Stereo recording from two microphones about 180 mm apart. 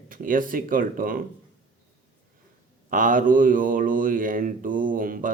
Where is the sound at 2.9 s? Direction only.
50° right (ahead or behind).